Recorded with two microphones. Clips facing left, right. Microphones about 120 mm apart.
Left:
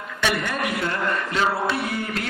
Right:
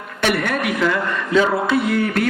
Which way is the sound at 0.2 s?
60° right (ahead or behind).